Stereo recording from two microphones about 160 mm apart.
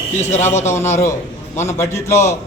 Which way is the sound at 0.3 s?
15° left (ahead or behind).